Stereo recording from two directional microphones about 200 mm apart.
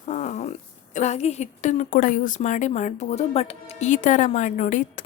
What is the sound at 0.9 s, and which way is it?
Speech, 35° left (ahead or behind).